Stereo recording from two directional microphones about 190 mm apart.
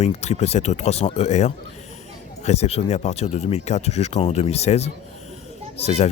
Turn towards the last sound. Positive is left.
turn(degrees=35)  # may be behind; listen again after turning